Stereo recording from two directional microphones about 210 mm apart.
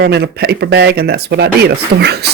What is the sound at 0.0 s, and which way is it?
Speech, 50° right (ahead or behind).